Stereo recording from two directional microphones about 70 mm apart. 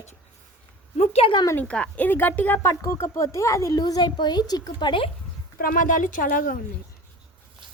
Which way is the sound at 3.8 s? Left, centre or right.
Left.